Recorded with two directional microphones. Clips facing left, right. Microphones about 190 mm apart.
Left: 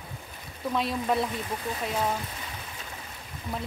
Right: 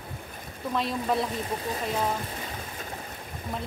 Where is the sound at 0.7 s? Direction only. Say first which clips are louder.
Even; centre (ahead or behind).